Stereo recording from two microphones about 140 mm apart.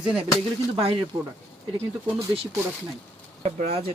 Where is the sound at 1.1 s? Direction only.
35° right (ahead or behind).